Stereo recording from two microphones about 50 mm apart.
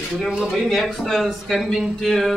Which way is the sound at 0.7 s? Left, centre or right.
Centre.